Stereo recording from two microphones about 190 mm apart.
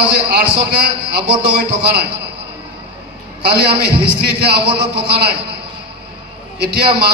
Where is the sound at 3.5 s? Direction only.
55° right (ahead or behind).